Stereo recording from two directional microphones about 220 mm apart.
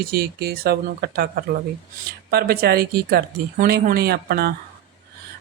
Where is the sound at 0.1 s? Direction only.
45° right (ahead or behind).